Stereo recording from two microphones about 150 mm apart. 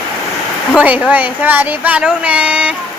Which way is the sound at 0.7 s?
10° right (ahead or behind).